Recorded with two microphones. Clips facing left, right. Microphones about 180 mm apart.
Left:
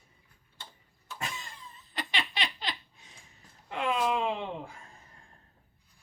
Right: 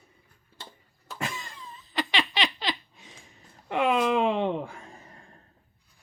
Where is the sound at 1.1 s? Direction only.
90° right.